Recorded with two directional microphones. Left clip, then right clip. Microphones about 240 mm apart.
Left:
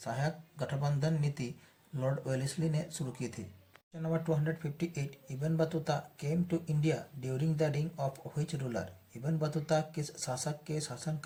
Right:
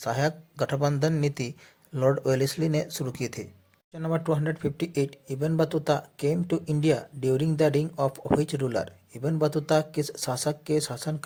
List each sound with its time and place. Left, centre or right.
0.0 s speech: right